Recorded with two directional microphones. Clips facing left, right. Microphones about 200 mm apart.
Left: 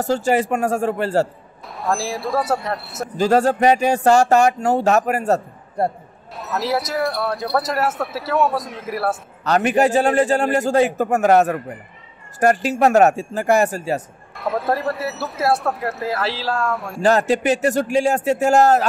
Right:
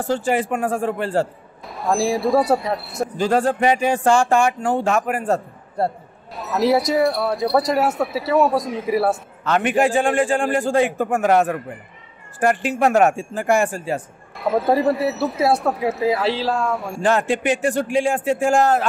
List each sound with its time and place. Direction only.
0.0 s a man's voice: 40° left (ahead or behind)
1.7 s speech: centre (ahead or behind)
3.2 s a man's voice: 40° left (ahead or behind)
6.3 s speech: centre (ahead or behind)
9.4 s a man's voice: 40° left (ahead or behind)
14.3 s speech: centre (ahead or behind)
17.0 s a man's voice: 40° left (ahead or behind)